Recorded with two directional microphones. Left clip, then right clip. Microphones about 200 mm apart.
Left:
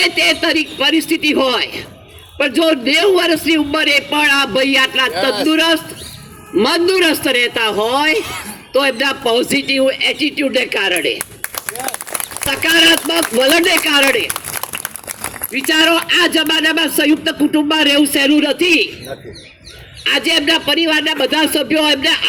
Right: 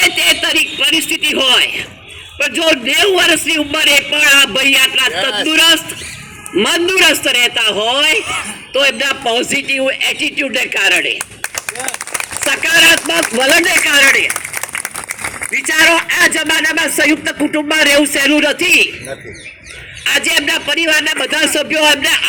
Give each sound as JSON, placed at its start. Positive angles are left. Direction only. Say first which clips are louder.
{"t": 0.0, "sound": "a man's voice", "louder": "right 2 dB", "side_deg": 10}
{"t": 12.5, "sound": "a man's voice", "louder": "right 2 dB", "side_deg": 10}
{"t": 15.5, "sound": "a man's voice", "louder": "right 2 dB", "side_deg": 25}
{"t": 20.1, "sound": "a man's voice", "louder": "even", "side_deg": 15}